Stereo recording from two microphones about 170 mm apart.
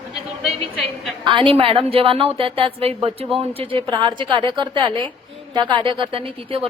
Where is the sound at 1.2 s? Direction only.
30° right (ahead or behind).